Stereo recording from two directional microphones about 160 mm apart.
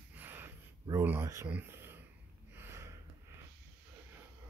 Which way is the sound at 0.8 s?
15° right (ahead or behind).